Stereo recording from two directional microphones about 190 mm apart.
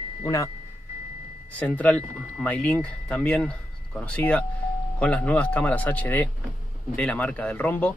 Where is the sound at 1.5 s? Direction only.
5° left (ahead or behind).